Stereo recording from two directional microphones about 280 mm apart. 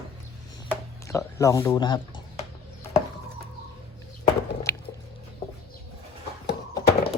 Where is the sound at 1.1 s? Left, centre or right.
Centre.